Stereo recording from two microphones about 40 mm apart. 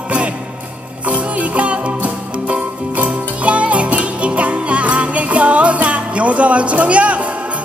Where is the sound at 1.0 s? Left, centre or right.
Right.